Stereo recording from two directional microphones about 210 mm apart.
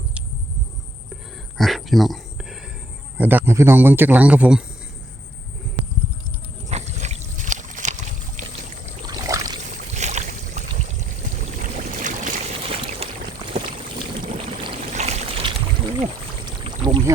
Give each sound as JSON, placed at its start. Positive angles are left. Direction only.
{"t": 1.5, "sound": "a sound", "side_deg": 0}
{"t": 3.2, "sound": "a man's voice", "side_deg": -10}
{"t": 6.7, "sound": "rowboat", "side_deg": -30}
{"t": 9.0, "sound": "rowboat", "side_deg": -15}
{"t": 9.6, "sound": "boat", "side_deg": -35}
{"t": 10.7, "sound": "a sound", "side_deg": -35}
{"t": 14.2, "sound": "boat", "side_deg": -30}